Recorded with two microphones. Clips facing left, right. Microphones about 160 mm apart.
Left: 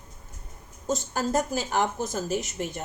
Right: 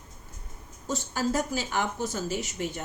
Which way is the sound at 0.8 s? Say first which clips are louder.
Left 1 dB; 50° left (ahead or behind).